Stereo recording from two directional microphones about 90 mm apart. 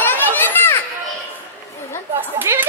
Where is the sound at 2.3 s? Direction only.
25° right (ahead or behind).